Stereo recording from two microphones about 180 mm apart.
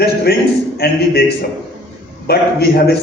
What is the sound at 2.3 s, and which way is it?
Speech, 60° left (ahead or behind).